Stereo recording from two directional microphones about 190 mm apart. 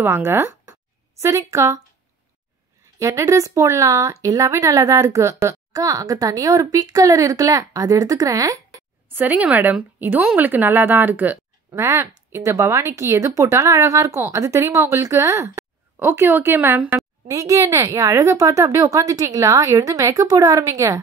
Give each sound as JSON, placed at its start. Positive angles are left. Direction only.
{"t": 0.0, "sound": "speech", "side_deg": -10}
{"t": 3.0, "sound": "speech", "side_deg": -15}